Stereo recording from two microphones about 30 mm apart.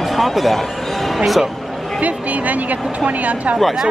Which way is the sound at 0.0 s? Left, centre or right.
Centre.